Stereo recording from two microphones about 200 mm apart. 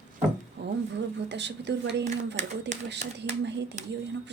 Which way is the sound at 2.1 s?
35° right (ahead or behind).